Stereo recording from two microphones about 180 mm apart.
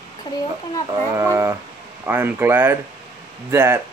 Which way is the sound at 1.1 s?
15° right (ahead or behind).